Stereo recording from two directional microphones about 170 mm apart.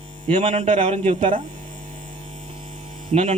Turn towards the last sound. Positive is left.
turn(degrees=-40)  # may be behind; listen again after turning